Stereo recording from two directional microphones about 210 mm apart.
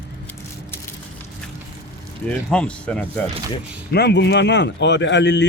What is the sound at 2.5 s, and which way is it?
Speech, 5° left (ahead or behind).